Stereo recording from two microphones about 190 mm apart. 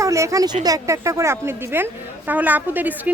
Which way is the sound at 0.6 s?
15° right (ahead or behind).